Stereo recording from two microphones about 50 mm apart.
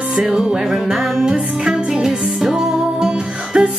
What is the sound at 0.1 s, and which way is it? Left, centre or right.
Music, centre.